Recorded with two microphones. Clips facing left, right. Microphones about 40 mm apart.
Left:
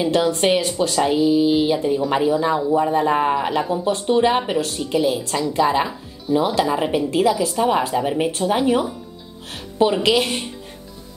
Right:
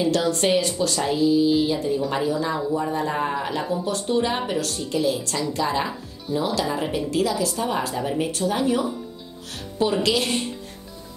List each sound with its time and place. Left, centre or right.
0.0 s a woman's voice: left